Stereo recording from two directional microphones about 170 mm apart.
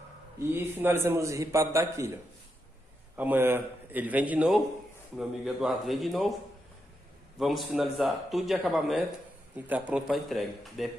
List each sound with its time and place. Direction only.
0.4 s a man's voice: 15° right (ahead or behind)
3.2 s a man's voice: 10° right (ahead or behind)
7.3 s a man's voice: centre (ahead or behind)